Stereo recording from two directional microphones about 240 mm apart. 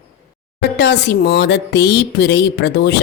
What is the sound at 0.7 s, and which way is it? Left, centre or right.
Music, left.